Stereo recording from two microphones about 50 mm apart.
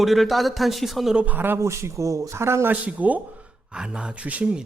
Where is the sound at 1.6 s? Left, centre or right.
Right.